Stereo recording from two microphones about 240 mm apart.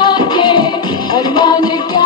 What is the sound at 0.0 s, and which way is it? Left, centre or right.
Music, centre.